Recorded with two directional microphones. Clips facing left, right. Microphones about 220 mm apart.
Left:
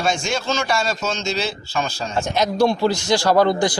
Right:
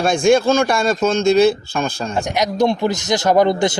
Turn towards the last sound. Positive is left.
turn(degrees=-20)  # may be behind; listen again after turning